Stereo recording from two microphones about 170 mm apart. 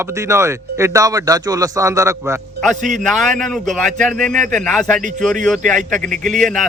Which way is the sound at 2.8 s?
50° right (ahead or behind).